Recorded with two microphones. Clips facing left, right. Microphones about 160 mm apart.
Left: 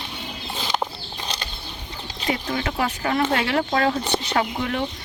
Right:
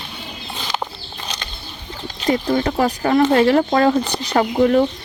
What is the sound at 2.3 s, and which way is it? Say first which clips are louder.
Speech: right 8 dB; 35° right (ahead or behind).